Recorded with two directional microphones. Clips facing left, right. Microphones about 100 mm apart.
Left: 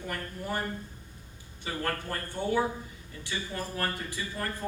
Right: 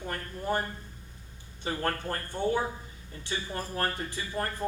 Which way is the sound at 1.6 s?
35° right (ahead or behind).